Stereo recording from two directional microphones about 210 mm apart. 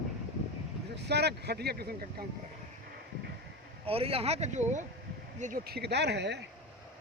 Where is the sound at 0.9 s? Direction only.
50° right (ahead or behind).